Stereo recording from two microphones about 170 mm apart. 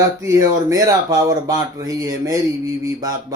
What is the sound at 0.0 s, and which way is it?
Speech, 20° right (ahead or behind).